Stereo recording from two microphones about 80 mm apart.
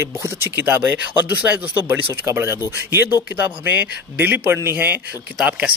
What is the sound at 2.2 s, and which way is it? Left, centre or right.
Speech, right.